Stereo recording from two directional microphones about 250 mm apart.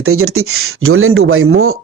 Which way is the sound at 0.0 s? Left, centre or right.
Right.